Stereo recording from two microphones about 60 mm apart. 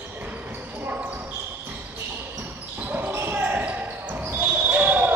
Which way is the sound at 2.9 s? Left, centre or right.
Right.